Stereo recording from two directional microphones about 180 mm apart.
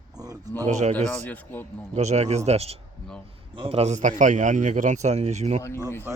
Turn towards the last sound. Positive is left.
turn(degrees=15)  # may be behind; listen again after turning